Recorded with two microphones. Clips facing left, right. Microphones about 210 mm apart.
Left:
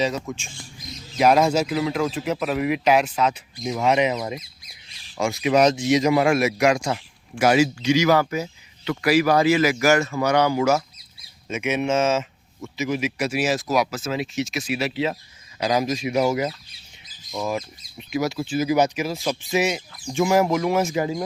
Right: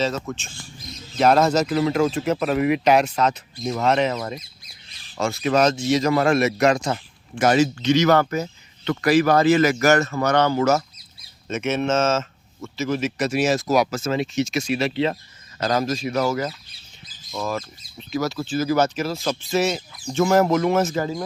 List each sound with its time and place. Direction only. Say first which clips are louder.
0.0 s speech: even; 15° left (ahead or behind)
6.1 s speech: right 2 dB; 5° left (ahead or behind)
19.7 s speech: right 1 dB; centre (ahead or behind)
20.9 s speech: left 1 dB; 20° left (ahead or behind)